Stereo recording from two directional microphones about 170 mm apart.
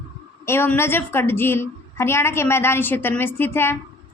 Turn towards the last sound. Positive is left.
turn(degrees=15)  # may be behind; listen again after turning